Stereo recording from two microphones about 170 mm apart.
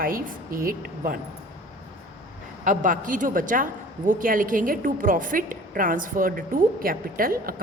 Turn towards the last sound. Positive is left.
turn(degrees=-55)  # may be behind; listen again after turning